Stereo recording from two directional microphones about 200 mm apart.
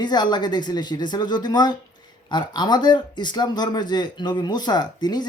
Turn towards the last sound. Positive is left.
turn(degrees=20)  # may be behind; listen again after turning